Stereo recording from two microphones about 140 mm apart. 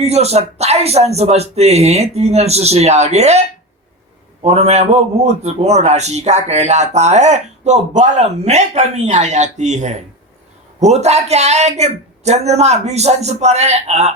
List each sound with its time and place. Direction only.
0.0 s a man's voice: 50° right (ahead or behind)
4.4 s a man's voice: 50° right (ahead or behind)